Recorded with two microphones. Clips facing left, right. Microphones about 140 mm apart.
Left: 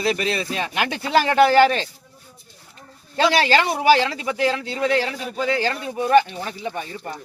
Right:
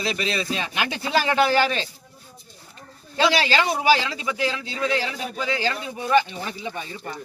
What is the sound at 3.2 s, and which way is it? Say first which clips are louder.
Speech: left 3 dB; 50° left (ahead or behind).